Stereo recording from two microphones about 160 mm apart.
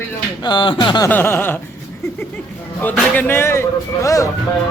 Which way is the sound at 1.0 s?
15° left (ahead or behind).